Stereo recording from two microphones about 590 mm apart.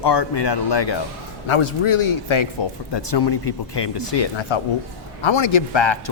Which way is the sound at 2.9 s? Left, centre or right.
Left.